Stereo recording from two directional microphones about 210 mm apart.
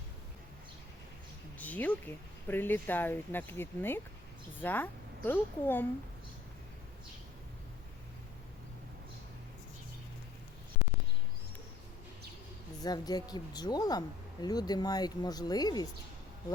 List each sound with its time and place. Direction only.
1.5 s speech: 5° left (ahead or behind)
12.8 s speech: 20° left (ahead or behind)